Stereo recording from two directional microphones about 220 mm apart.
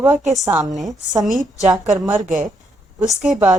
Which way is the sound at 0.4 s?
15° right (ahead or behind).